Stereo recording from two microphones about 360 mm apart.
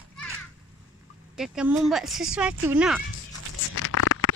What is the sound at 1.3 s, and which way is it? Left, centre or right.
Speech, centre.